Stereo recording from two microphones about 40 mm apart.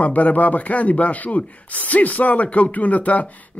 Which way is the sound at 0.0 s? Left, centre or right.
Left.